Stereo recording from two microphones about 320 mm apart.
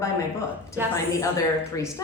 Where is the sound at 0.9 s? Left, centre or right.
Centre.